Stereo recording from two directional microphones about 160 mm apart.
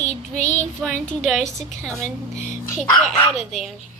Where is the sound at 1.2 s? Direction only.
Centre (ahead or behind).